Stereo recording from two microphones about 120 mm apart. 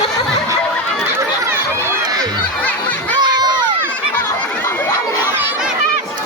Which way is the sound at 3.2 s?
35° right (ahead or behind).